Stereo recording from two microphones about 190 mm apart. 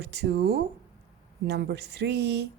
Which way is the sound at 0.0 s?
60° right (ahead or behind).